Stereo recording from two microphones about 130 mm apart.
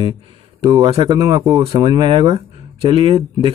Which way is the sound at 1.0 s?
30° right (ahead or behind).